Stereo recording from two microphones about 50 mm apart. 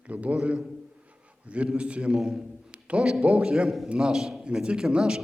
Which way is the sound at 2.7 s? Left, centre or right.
Right.